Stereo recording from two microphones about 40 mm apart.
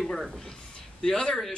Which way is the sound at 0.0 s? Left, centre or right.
Centre.